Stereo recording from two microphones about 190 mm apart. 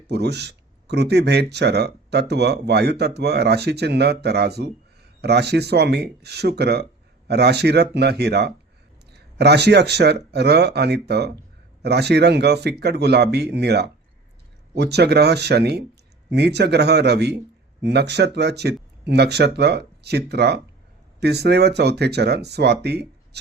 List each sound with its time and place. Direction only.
0.1 s speech: 60° right (ahead or behind)